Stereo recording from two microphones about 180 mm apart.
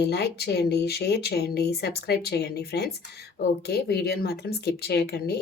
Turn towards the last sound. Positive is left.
turn(degrees=65)  # may be behind; listen again after turning